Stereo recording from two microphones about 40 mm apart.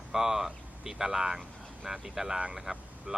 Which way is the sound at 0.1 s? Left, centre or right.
Centre.